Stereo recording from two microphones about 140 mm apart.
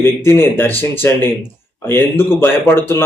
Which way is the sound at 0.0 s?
15° left (ahead or behind).